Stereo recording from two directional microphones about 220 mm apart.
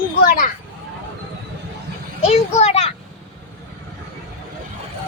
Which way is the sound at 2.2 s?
30° left (ahead or behind).